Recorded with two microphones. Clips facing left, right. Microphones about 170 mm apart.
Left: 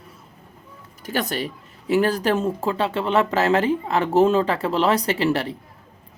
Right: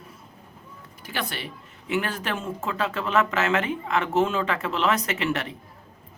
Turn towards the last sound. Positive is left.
turn(degrees=35)  # may be behind; listen again after turning